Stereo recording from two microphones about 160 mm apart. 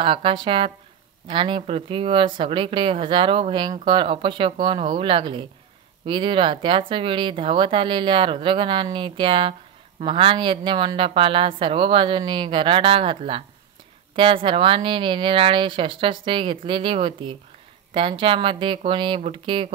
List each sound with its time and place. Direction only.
0.0 s speech: 35° right (ahead or behind)